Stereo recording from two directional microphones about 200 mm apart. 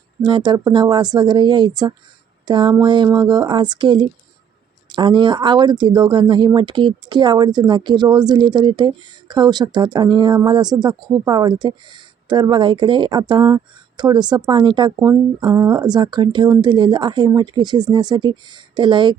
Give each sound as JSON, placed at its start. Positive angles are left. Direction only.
{"t": 0.2, "sound": "speech", "side_deg": -20}